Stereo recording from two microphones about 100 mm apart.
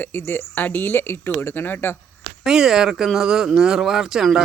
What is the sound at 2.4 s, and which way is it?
Speech, 5° right (ahead or behind).